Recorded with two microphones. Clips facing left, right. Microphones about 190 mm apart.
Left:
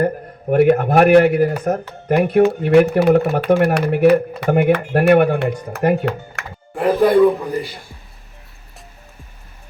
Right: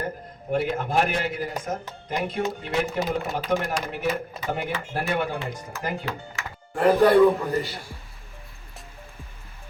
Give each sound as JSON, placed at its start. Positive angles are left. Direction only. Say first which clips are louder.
{"t": 0.5, "sound": "speech", "louder": "left 11 dB", "side_deg": 60}
{"t": 6.7, "sound": "speech", "louder": "left 3 dB", "side_deg": 15}